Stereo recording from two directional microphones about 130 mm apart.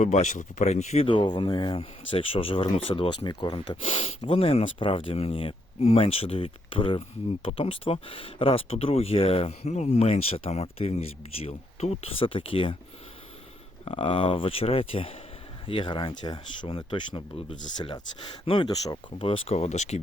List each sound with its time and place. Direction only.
0.0 s speech: 70° left (ahead or behind)
1.0 s speech: 40° left (ahead or behind)
13.8 s speech: 45° left (ahead or behind)